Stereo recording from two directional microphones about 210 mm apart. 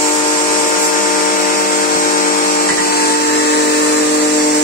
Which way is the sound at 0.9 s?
40° left (ahead or behind).